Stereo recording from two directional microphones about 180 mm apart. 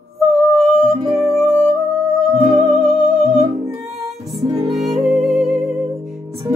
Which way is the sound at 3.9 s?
Centre (ahead or behind).